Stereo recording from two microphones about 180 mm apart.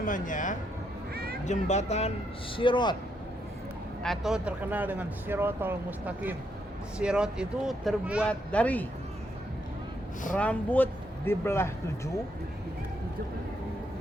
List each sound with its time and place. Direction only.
0.0 s speech: 45° left (ahead or behind)
1.1 s a sound: 55° right (ahead or behind)
1.5 s speech: 40° left (ahead or behind)
2.6 s speech: 25° left (ahead or behind)
4.0 s speech: centre (ahead or behind)
8.3 s speech: 10° left (ahead or behind)
10.3 s speech: 10° left (ahead or behind)